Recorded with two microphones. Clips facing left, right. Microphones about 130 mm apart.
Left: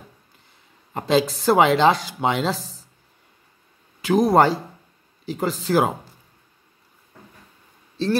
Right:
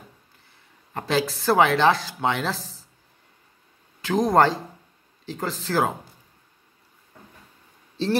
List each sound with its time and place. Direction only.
0.9 s speech: 15° left (ahead or behind)
4.0 s speech: 10° left (ahead or behind)